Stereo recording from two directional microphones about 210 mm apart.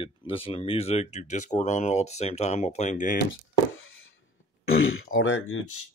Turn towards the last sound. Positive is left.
turn(degrees=75)  # may be behind; listen again after turning